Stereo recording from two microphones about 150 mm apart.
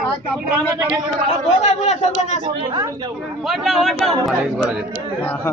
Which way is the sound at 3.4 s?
Centre (ahead or behind).